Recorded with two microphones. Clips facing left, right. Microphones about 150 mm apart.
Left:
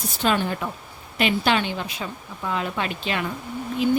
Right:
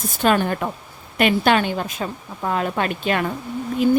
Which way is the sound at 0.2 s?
50° right (ahead or behind).